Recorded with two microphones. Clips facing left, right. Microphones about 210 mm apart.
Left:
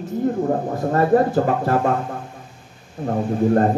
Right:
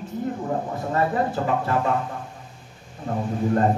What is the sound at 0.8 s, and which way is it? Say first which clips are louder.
Speech: left 8 dB; 45° left (ahead or behind).